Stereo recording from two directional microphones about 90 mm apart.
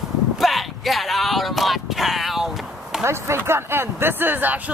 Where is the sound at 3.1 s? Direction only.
30° right (ahead or behind).